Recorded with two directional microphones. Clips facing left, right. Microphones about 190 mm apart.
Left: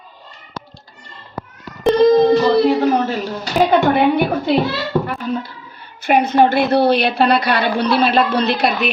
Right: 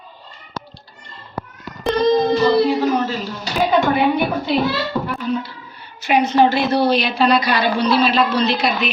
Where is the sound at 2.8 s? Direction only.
60° left (ahead or behind).